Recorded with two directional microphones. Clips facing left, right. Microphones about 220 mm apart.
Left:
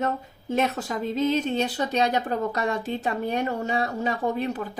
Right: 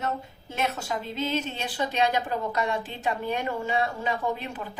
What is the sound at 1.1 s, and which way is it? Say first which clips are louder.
A woman's voice: left 8 dB; 40° left (ahead or behind).